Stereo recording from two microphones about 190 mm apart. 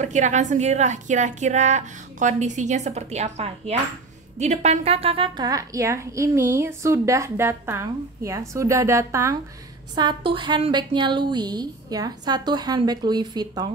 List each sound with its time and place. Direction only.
0.0 s a woman's voice: 40° right (ahead or behind); by 13.7 s 20° right (ahead or behind)